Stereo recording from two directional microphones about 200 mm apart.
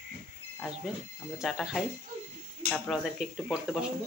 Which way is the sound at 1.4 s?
Centre (ahead or behind).